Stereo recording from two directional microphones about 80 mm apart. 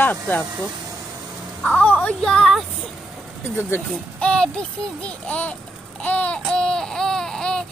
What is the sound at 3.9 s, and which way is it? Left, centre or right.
Speech, centre.